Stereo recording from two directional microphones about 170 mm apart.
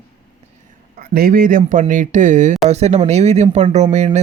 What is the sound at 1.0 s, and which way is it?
Speech, 60° right (ahead or behind).